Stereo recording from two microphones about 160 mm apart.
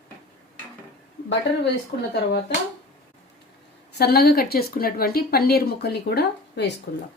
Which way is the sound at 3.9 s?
80° left.